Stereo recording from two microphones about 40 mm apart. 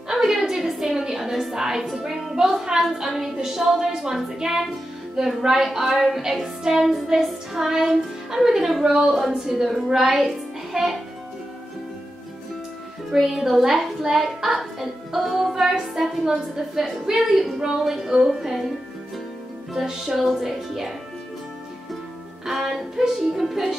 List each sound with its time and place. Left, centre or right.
0.1 s music: centre
2.0 s a sound: centre
2.8 s a woman's voice: centre
8.8 s a woman's voice: centre
10.2 s music: centre
13.1 s a woman's voice: centre
14.2 s music: centre
15.7 s a woman's voice: centre
19.7 s a woman's voice: centre
22.5 s a woman's voice: centre